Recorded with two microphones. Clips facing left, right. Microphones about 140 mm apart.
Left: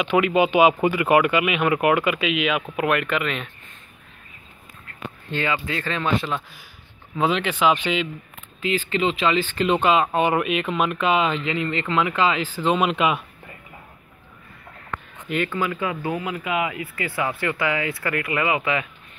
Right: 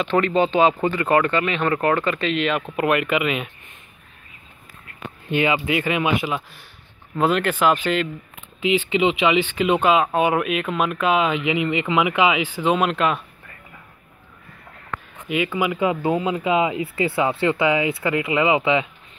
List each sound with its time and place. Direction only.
0.0 s speech: 10° left (ahead or behind)
5.3 s speech: 15° right (ahead or behind)
8.6 s speech: 15° right (ahead or behind)
12.7 s speech: centre (ahead or behind)
15.2 s speech: 5° right (ahead or behind); by 18.9 s 25° right (ahead or behind)